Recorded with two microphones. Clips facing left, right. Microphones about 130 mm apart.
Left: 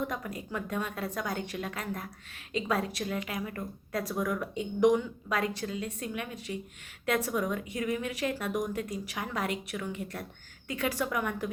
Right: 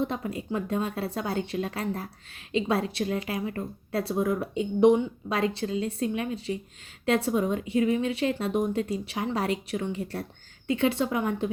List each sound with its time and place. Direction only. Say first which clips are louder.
0.0 s a woman's voice: right 5 dB; 30° right (ahead or behind)